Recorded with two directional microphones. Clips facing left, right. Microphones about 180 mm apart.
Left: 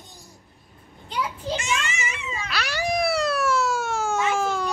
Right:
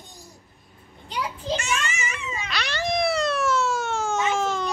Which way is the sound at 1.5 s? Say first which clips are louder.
Right 1 dB; 15° left (ahead or behind).